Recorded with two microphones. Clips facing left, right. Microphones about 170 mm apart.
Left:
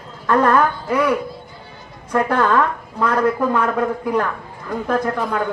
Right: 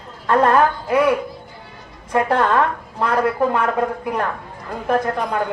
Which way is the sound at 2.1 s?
25° right (ahead or behind).